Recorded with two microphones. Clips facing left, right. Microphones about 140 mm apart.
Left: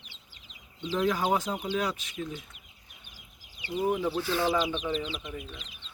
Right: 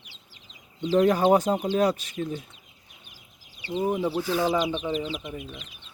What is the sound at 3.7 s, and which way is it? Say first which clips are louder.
Speech: right 2 dB; 25° right (ahead or behind).